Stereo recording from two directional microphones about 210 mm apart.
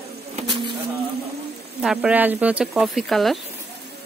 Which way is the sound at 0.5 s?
20° right (ahead or behind).